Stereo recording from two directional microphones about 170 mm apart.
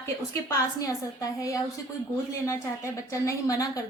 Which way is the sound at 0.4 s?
20° left (ahead or behind).